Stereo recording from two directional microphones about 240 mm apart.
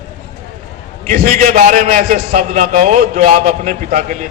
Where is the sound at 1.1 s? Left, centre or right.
Right.